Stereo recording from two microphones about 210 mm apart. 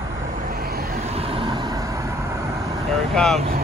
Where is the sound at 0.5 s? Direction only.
45° right (ahead or behind).